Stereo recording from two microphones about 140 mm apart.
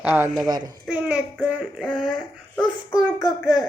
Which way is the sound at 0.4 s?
30° right (ahead or behind).